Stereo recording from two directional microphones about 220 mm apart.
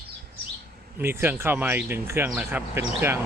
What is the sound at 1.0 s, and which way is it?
Speech, 10° right (ahead or behind).